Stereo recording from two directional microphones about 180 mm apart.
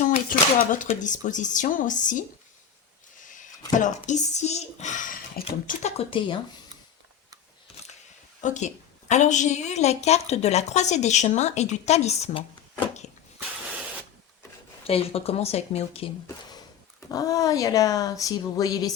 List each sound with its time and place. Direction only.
0.0 s speech: 45° left (ahead or behind)
3.8 s speech: 45° left (ahead or behind)
5.6 s speech: 35° left (ahead or behind)
8.4 s a woman's voice: 40° left (ahead or behind)
14.8 s a woman's voice: 35° left (ahead or behind)
17.1 s speech: 20° left (ahead or behind)